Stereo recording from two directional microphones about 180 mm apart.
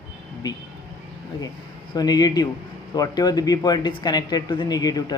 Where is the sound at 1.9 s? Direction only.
20° left (ahead or behind).